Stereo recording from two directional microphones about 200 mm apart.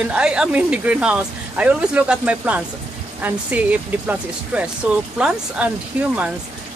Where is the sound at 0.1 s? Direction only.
5° right (ahead or behind).